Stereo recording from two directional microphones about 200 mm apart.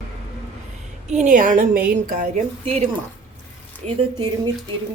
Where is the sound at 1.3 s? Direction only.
40° right (ahead or behind).